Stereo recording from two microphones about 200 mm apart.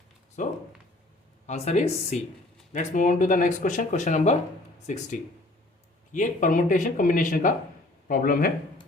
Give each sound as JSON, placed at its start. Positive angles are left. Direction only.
{"t": 0.4, "sound": "a sound", "side_deg": 40}
{"t": 1.5, "sound": "speech", "side_deg": 35}
{"t": 6.1, "sound": "speech", "side_deg": 40}